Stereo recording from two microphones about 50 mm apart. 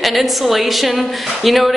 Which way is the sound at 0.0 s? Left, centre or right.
Centre.